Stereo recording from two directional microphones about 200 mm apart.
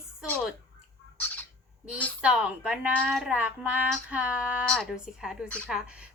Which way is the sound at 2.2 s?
5° right (ahead or behind).